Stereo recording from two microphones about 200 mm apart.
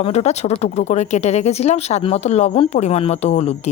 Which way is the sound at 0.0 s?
35° left (ahead or behind).